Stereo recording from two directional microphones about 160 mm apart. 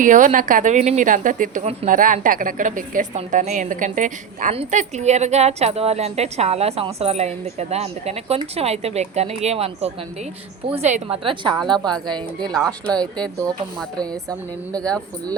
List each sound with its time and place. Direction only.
0.0 s a woman's voice: 50° right (ahead or behind); by 11.9 s 25° right (ahead or behind)
12.5 s speech: 5° left (ahead or behind)
14.0 s a woman's voice: 25° right (ahead or behind)
14.8 s speech: 5° left (ahead or behind)